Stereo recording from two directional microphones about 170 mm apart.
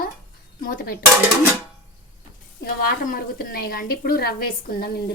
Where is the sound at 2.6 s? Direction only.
60° left (ahead or behind).